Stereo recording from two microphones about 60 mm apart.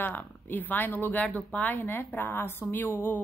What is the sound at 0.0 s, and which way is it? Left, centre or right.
A woman's voice, left.